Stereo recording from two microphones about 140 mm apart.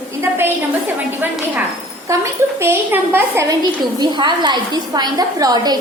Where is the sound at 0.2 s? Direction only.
15° right (ahead or behind).